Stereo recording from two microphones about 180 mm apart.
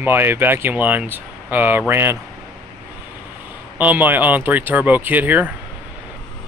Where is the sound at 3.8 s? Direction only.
10° right (ahead or behind).